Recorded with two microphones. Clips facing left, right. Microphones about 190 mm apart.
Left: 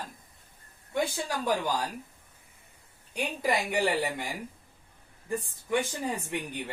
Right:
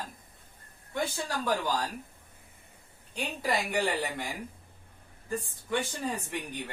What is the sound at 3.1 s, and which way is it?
A woman's voice, 10° left (ahead or behind).